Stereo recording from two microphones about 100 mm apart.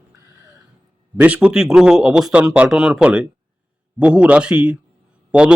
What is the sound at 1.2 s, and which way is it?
A man's voice, 15° right (ahead or behind).